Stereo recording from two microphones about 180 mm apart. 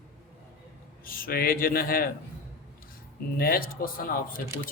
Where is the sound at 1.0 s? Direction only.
55° left (ahead or behind).